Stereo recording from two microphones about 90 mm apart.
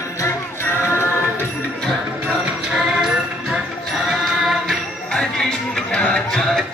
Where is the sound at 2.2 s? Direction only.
15° right (ahead or behind).